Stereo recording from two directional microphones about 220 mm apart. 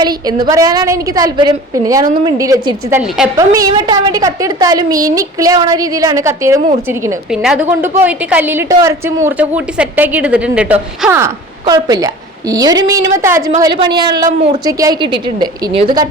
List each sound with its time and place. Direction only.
0.0 s a woman's voice: 20° right (ahead or behind)
7.3 s a woman's voice: 5° right (ahead or behind); by 16.0 s 20° right (ahead or behind)